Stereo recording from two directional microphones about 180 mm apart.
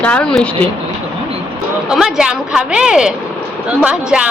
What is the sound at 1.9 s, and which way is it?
Speech, 5° right (ahead or behind).